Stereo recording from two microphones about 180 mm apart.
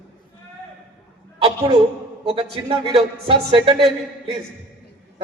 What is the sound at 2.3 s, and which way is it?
A woman's voice, 30° right (ahead or behind).